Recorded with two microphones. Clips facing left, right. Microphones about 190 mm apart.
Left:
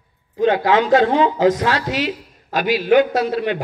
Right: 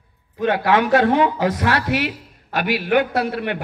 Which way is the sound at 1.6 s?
60° right (ahead or behind).